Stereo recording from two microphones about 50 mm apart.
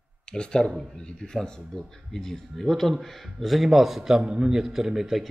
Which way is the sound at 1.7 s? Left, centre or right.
Centre.